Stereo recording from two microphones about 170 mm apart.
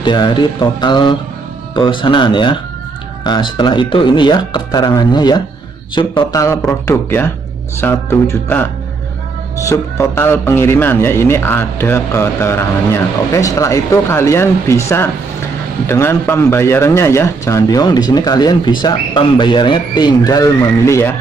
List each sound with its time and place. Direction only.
0.0 s a man's voice: 25° left (ahead or behind)
9.7 s a man's voice: 15° left (ahead or behind)